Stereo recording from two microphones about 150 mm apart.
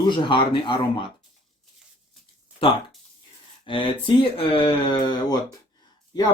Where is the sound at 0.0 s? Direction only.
30° left (ahead or behind).